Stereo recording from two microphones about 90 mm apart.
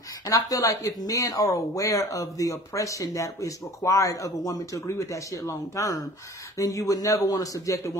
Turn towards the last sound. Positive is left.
turn(degrees=35)  # may be behind; listen again after turning